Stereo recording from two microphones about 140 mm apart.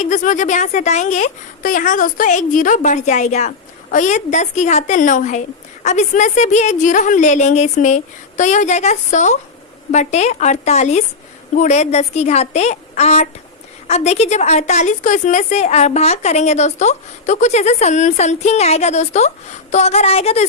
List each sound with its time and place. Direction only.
0.0 s a woman's voice: 60° left (ahead or behind)